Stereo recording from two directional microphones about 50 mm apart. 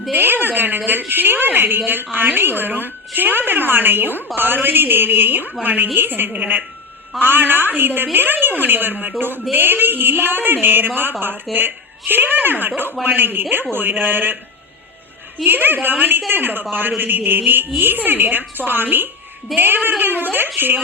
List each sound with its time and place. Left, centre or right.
0.1 s a woman's voice: right
15.4 s a woman's voice: right